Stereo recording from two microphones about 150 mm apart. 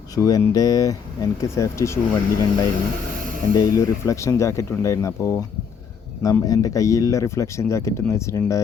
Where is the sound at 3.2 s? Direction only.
65° right (ahead or behind).